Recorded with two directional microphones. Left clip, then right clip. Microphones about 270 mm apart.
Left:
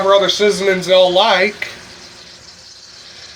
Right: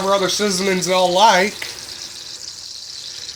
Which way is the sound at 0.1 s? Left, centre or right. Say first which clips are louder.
Left 6 dB; right.